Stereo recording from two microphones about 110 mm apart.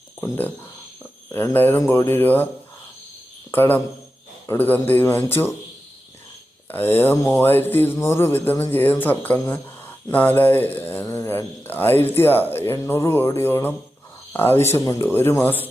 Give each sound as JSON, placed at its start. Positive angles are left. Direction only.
{"t": 0.2, "sound": "speech", "side_deg": 15}
{"t": 3.5, "sound": "speech", "side_deg": 15}
{"t": 6.7, "sound": "speech", "side_deg": 20}
{"t": 11.0, "sound": "a sound", "side_deg": 30}
{"t": 11.3, "sound": "speech", "side_deg": 20}